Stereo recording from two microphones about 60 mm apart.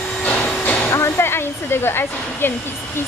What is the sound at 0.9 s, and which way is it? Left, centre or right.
Speech, left.